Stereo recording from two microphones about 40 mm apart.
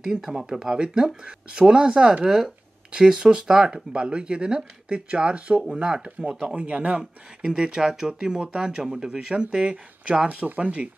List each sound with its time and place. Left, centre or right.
0.0 s speech: centre
2.2 s speech: centre
6.4 s speech: right
7.4 s speech: right
10.2 s speech: right